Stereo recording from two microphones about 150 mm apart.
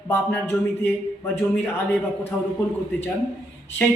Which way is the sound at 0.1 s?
15° left (ahead or behind).